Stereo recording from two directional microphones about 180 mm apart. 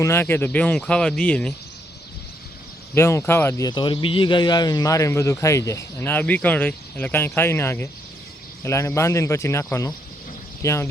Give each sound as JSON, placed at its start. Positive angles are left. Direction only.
{"t": 0.0, "sound": "speech", "side_deg": 15}
{"t": 2.9, "sound": "speech", "side_deg": 15}
{"t": 3.7, "sound": "speech", "side_deg": 25}